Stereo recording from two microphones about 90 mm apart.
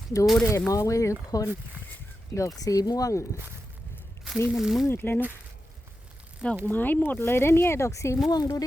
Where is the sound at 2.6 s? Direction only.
45° left (ahead or behind).